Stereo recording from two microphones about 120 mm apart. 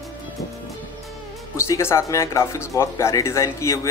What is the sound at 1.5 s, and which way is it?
Speech, 25° left (ahead or behind).